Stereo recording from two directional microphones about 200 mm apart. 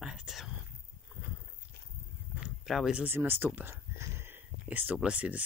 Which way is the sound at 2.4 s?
Centre (ahead or behind).